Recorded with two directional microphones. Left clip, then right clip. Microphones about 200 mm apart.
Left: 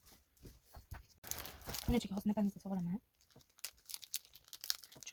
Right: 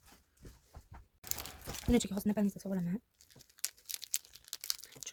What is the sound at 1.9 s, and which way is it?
Speech, 60° right (ahead or behind).